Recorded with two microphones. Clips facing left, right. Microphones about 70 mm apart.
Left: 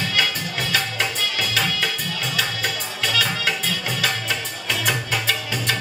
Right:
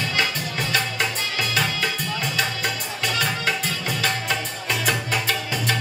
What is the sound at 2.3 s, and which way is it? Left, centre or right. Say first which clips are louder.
Music: even; right.